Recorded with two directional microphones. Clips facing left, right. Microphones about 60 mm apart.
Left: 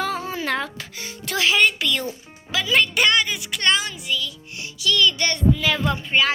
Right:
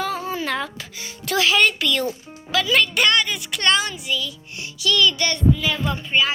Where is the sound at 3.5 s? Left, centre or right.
Centre.